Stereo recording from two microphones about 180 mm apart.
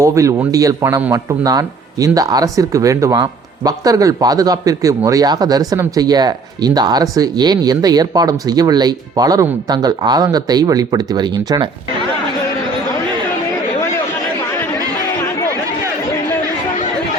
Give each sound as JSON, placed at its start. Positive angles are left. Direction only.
{"t": 0.0, "sound": "speech", "side_deg": -15}